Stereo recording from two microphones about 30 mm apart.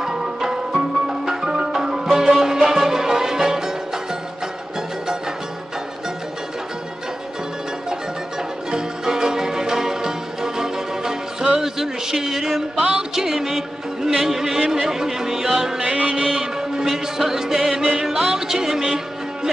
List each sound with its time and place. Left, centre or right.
0.0 s music: centre
8.7 s music: right
11.6 s a sound: centre
13.1 s music: centre